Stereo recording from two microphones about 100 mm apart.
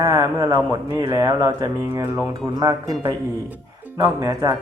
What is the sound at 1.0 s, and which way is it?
Speech, 30° right (ahead or behind).